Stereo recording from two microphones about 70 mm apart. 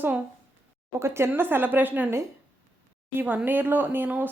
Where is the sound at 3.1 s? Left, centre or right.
Right.